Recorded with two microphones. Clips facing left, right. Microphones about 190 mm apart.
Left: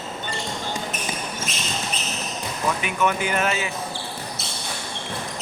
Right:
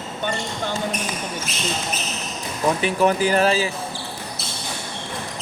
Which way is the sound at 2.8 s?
35° right (ahead or behind).